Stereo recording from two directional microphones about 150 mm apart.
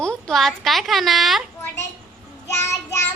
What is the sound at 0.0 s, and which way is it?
A woman's voice, 5° left (ahead or behind).